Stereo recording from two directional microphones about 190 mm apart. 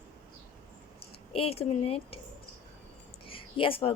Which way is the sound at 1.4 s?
30° left (ahead or behind).